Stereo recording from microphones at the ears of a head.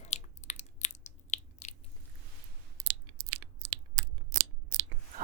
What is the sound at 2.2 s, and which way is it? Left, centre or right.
Chewing, right.